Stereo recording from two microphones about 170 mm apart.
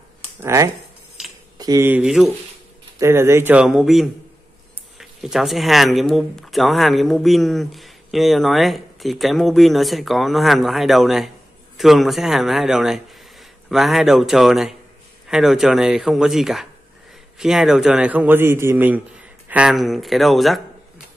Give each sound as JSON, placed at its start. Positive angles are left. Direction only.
{"t": 0.4, "sound": "speech", "side_deg": -15}
{"t": 1.9, "sound": "a man's voice", "side_deg": -5}